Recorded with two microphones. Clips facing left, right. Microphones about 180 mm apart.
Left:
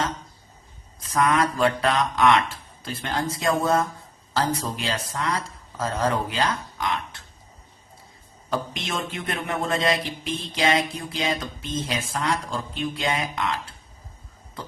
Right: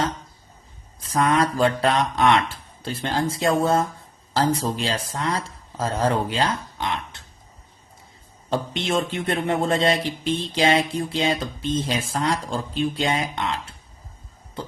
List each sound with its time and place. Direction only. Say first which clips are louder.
1.0 s speech: right 1 dB; 30° right (ahead or behind)
8.4 s speech: right 4 dB; 30° right (ahead or behind)